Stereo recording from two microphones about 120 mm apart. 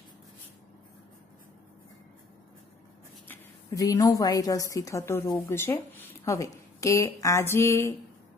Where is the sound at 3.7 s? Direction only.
30° left (ahead or behind).